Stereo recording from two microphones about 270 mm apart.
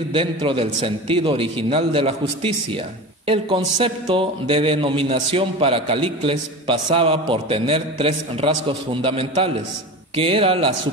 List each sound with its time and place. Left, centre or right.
0.1 s a man's voice: centre